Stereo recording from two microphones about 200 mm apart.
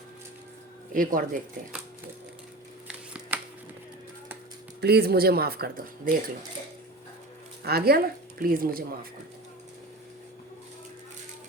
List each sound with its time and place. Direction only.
0.9 s speech: 45° right (ahead or behind)
2.8 s a sound: 5° right (ahead or behind)
4.8 s speech: 55° right (ahead or behind)
7.6 s speech: 50° right (ahead or behind)